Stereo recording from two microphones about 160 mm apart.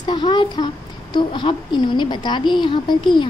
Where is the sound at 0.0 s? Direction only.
30° left (ahead or behind).